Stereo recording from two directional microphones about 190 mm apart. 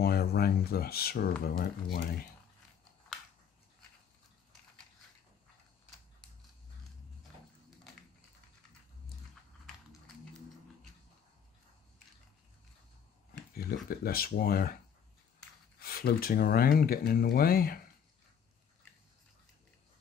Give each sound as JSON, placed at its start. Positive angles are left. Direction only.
{"t": 0.0, "sound": "speech", "side_deg": 55}
{"t": 13.8, "sound": "speech", "side_deg": 50}
{"t": 15.8, "sound": "speech", "side_deg": 55}